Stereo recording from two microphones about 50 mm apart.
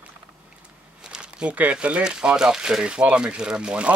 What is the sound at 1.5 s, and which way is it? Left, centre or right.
Speech, right.